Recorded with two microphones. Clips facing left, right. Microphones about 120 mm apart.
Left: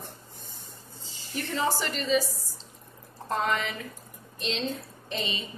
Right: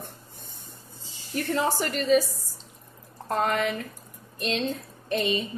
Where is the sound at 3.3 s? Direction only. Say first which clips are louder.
Right 3 dB; 50° right (ahead or behind).